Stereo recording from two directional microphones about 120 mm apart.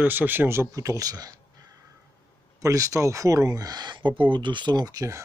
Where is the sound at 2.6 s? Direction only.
25° right (ahead or behind).